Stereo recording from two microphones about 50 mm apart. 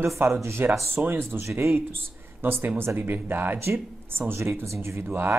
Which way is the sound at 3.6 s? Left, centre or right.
Right.